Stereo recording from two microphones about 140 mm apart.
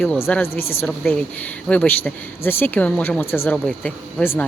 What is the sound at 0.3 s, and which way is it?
Speech, 5° left (ahead or behind).